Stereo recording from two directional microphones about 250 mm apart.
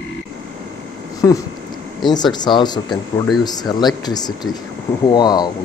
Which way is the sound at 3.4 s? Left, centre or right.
Centre.